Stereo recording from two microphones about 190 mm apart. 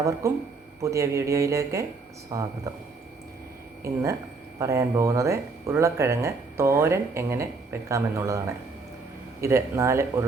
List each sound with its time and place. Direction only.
0.0 s speech: 15° right (ahead or behind)
3.8 s speech: 15° right (ahead or behind)
9.4 s speech: 15° right (ahead or behind)